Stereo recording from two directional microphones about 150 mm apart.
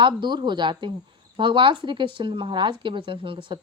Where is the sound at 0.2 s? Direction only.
30° right (ahead or behind).